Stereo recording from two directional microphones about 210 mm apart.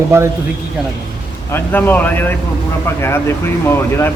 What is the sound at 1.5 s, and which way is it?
Speech, 10° left (ahead or behind).